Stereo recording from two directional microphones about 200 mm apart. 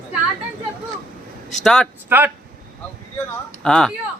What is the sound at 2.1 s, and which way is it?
Speech, 10° right (ahead or behind).